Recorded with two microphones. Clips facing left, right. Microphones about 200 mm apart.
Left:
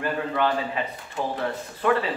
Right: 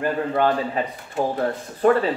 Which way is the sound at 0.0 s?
45° right (ahead or behind).